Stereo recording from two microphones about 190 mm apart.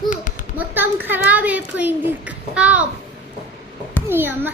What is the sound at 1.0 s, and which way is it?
A child's voice, 10° right (ahead or behind).